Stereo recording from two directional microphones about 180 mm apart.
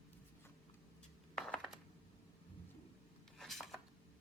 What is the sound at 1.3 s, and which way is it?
Coin, 5° left (ahead or behind).